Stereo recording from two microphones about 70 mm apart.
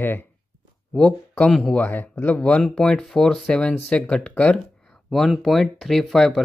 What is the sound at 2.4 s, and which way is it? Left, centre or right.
Speech, centre.